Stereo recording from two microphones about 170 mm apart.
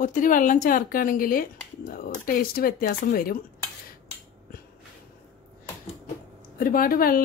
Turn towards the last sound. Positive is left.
turn(degrees=55)  # may be behind; listen again after turning